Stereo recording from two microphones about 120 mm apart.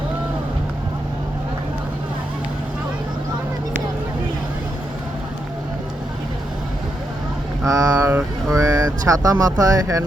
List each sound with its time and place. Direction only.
7.6 s speech: 30° right (ahead or behind)